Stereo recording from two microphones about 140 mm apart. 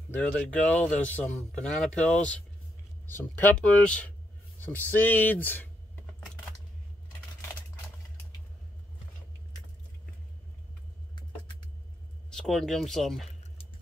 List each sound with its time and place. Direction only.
0.1 s speech: 10° left (ahead or behind)
2.0 s speech: 60° left (ahead or behind)
3.1 s speech: 15° left (ahead or behind)
4.6 s a sound: 15° left (ahead or behind)
4.9 s speech: 15° left (ahead or behind)
12.3 s speech: 5° left (ahead or behind)